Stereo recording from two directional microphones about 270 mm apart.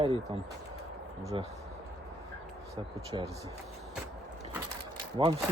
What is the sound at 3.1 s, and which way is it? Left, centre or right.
Speech, centre.